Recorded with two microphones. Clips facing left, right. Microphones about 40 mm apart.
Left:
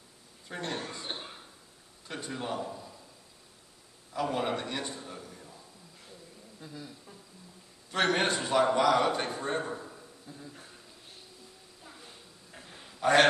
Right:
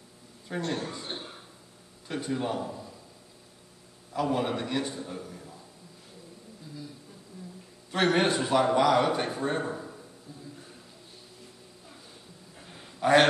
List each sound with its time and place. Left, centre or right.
0.6 s a man's voice: left
2.0 s a man's voice: centre
4.1 s a man's voice: centre
7.9 s a man's voice: centre
12.6 s a sound: centre